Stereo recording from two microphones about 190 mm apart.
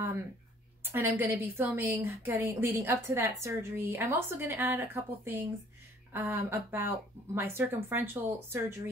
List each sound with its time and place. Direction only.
0.9 s a woman's voice: 15° right (ahead or behind)